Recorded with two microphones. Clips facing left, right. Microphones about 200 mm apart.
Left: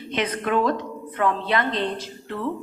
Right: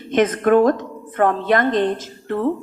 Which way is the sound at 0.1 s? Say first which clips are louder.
Right 9 dB; 50° right (ahead or behind).